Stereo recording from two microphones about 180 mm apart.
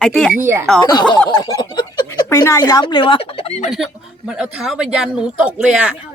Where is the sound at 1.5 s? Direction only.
15° left (ahead or behind); by 3.7 s 35° left (ahead or behind).